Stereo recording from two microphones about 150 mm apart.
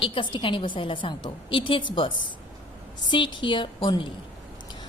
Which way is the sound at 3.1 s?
35° left (ahead or behind).